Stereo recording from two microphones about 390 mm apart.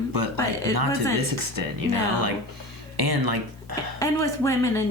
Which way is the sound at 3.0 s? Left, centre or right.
Right.